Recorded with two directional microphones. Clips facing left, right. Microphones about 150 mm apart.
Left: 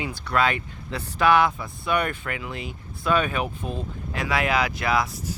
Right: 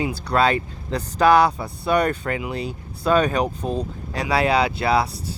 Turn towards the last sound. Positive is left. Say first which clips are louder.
# right 4 dB
turn(degrees=-30)  # may be behind; listen again after turning